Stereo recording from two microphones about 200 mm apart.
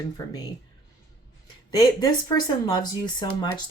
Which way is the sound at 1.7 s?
20° left (ahead or behind).